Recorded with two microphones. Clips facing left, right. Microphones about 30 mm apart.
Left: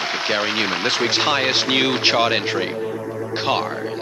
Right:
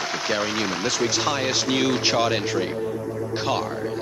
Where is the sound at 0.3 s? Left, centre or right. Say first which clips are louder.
Left 4 dB; left.